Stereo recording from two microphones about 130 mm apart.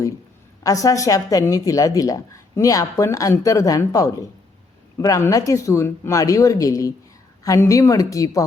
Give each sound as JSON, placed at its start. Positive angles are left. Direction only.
{"t": 0.6, "sound": "speech", "side_deg": 25}